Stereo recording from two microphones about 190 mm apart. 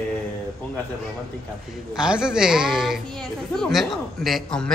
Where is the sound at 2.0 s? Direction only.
5° right (ahead or behind).